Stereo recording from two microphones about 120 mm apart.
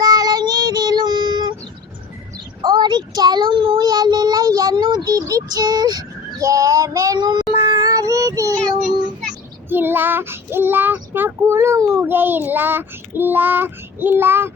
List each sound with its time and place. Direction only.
0.0 s child singing: 35° right (ahead or behind)
2.6 s child singing: 40° right (ahead or behind)
9.6 s child singing: 15° right (ahead or behind)